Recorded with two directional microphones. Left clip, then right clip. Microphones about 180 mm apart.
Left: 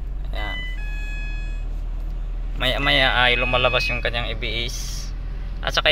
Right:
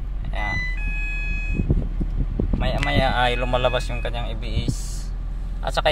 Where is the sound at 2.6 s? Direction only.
5° left (ahead or behind).